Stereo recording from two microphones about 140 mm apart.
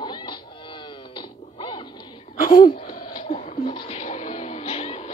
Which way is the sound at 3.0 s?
35° left (ahead or behind).